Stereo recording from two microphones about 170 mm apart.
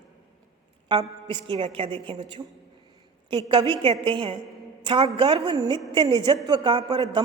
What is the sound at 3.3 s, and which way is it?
A woman's voice, 30° right (ahead or behind).